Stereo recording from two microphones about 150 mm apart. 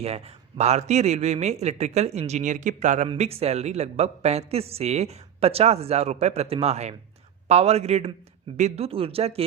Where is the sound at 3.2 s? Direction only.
45° right (ahead or behind).